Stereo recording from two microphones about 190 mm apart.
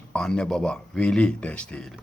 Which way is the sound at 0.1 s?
5° left (ahead or behind).